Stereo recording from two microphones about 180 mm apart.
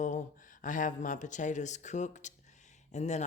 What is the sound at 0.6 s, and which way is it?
Speech, 45° left (ahead or behind).